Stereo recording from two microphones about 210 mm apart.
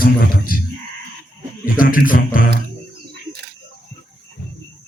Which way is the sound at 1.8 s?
40° left (ahead or behind).